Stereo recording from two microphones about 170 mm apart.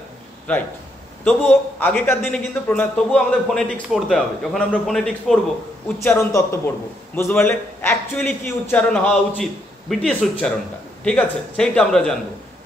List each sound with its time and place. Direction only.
0.5 s a man's voice: 10° left (ahead or behind)
6.0 s a man's voice: 15° left (ahead or behind)